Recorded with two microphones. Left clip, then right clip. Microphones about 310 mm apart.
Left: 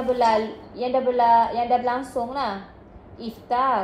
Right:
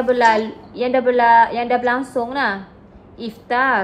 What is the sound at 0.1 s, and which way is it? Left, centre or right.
A woman's voice, right.